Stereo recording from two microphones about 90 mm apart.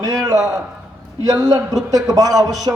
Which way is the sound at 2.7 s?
40° right (ahead or behind).